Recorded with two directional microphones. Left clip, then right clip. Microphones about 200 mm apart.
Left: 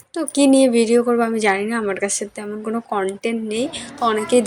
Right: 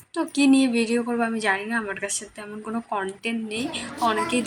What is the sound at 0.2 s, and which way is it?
A woman's voice, 25° left (ahead or behind).